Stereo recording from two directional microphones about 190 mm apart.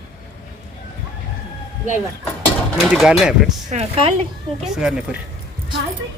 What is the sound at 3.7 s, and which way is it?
Speech, 30° right (ahead or behind).